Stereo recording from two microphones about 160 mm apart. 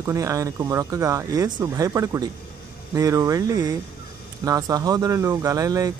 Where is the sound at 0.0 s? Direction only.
20° right (ahead or behind).